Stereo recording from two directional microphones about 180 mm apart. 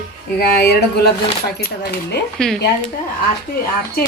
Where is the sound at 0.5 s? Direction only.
60° left (ahead or behind).